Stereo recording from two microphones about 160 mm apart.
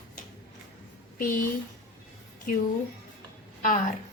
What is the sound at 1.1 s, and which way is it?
Speech, 60° left (ahead or behind).